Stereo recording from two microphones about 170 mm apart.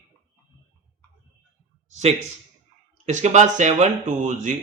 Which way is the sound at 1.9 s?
40° right (ahead or behind).